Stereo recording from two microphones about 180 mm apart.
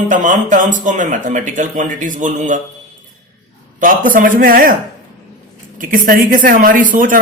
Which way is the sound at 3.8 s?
50° right (ahead or behind).